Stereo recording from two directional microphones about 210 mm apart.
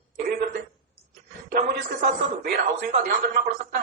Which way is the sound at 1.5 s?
45° right (ahead or behind).